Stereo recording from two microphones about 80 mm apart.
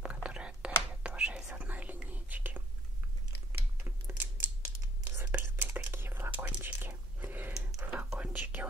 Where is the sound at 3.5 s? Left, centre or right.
Right.